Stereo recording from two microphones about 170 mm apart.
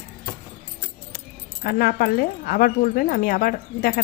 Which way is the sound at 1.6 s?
60° left (ahead or behind).